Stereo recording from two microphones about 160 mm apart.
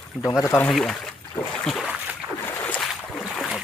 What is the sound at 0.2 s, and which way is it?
Speech, 20° left (ahead or behind).